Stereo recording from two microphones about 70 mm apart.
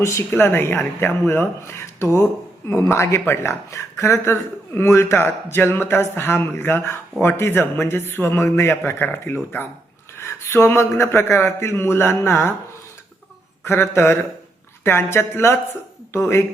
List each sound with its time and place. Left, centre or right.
0.0 s a woman's voice: left
0.3 s speech: left
13.7 s speech: left